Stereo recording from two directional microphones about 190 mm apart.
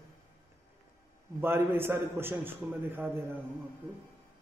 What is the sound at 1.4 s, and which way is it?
A man's voice, 10° right (ahead or behind).